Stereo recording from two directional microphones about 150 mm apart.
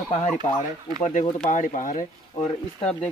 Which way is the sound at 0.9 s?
55° left (ahead or behind).